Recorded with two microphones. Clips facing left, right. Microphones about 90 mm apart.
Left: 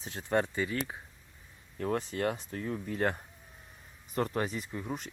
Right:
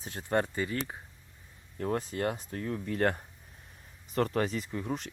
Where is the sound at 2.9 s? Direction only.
55° right (ahead or behind).